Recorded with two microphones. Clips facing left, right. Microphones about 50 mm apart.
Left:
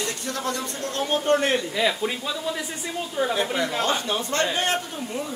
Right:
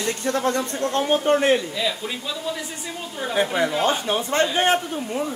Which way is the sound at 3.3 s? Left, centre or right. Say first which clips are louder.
Right 3 dB; centre.